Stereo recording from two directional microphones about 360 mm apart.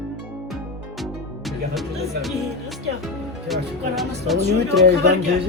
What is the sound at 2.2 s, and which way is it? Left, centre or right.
Speech, centre.